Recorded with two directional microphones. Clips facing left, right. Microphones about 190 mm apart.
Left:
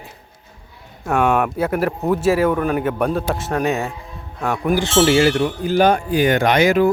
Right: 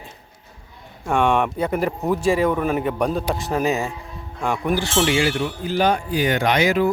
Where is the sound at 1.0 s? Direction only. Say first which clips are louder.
Left 1 dB; 5° left (ahead or behind).